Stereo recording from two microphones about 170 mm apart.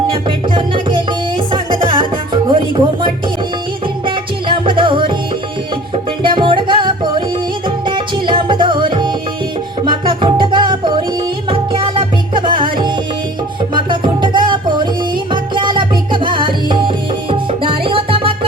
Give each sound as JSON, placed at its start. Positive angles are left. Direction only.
{"t": 0.1, "sound": "music", "side_deg": -30}
{"t": 6.2, "sound": "music", "side_deg": -30}